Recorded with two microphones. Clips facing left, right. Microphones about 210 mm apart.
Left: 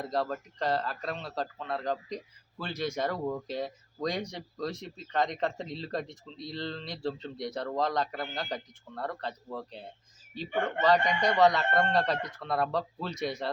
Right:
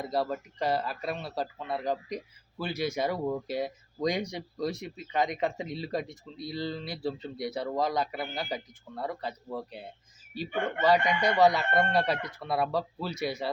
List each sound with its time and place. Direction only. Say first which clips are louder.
0.0 s a man's voice: right 1 dB; 10° right (ahead or behind)